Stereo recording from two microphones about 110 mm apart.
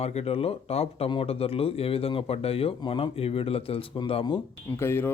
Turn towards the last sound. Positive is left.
turn(degrees=20)  # may be behind; listen again after turning